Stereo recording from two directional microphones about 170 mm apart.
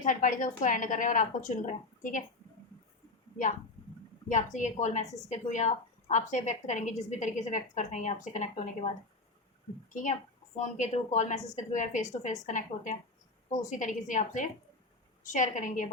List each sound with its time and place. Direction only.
0.0 s a woman's voice: 50° left (ahead or behind)
4.3 s a woman's voice: 45° left (ahead or behind)
9.9 s a woman's voice: 50° left (ahead or behind)